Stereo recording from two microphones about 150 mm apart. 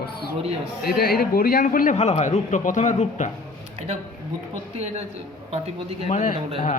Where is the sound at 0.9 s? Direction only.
90° left; by 2.0 s 60° left (ahead or behind).